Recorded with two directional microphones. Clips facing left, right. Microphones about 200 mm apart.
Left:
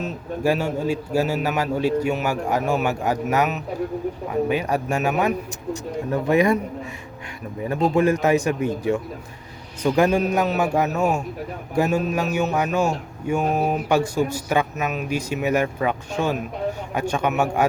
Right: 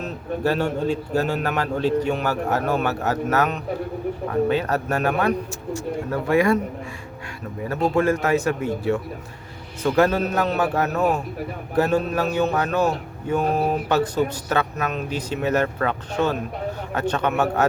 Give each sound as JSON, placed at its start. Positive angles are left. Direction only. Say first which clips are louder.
{"t": 0.4, "sound": "speech", "louder": "even", "side_deg": 10}
{"t": 7.9, "sound": "speech", "louder": "left 2 dB", "side_deg": 15}